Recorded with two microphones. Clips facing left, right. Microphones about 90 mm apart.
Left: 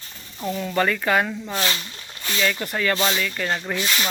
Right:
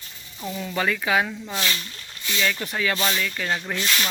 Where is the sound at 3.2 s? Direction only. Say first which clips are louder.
Left 1 dB; centre (ahead or behind).